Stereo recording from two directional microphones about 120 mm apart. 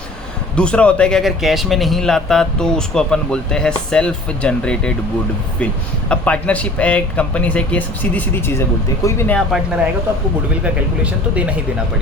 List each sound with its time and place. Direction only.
0.5 s speech: 10° left (ahead or behind)
6.1 s speech: 10° left (ahead or behind)
10.5 s speech: 10° right (ahead or behind)